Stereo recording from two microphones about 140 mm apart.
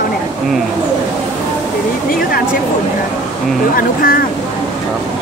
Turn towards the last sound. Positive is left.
turn(degrees=90)